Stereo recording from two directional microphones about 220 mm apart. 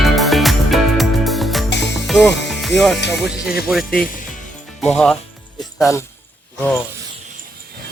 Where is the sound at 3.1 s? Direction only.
Centre (ahead or behind).